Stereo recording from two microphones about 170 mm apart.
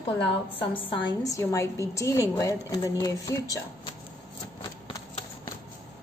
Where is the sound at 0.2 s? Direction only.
30° left (ahead or behind).